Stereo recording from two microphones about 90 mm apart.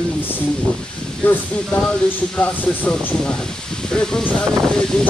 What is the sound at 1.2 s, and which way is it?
Speech, 15° left (ahead or behind).